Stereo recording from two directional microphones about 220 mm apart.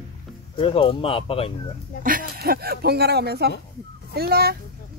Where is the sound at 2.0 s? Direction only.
40° right (ahead or behind).